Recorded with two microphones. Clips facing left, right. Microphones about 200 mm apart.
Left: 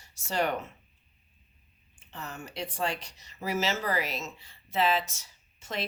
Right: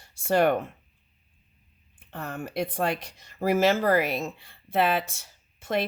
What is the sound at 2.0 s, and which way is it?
Speech, 55° right (ahead or behind).